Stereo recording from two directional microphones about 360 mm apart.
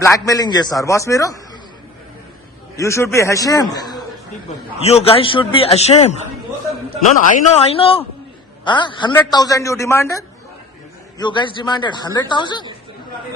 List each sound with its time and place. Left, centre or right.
0.0 s a man's voice: centre
2.7 s a man's voice: centre
7.2 s a man's voice: centre
11.2 s a man's voice: centre